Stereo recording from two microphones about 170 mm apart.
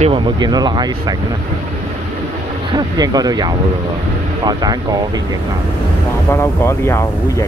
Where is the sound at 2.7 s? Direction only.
25° right (ahead or behind).